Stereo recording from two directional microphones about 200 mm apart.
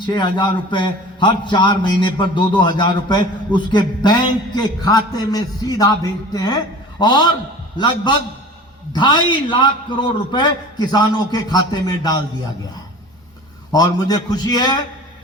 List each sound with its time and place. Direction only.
0.0 s a man's voice: 25° left (ahead or behind)
13.7 s a man's voice: 20° left (ahead or behind)